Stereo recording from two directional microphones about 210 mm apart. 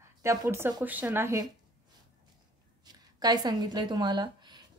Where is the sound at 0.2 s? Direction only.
15° right (ahead or behind).